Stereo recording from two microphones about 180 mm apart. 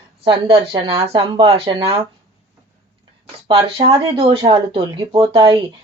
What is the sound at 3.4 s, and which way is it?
Speech, 30° right (ahead or behind).